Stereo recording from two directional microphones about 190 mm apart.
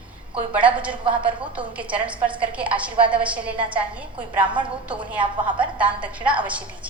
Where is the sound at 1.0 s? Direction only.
25° right (ahead or behind).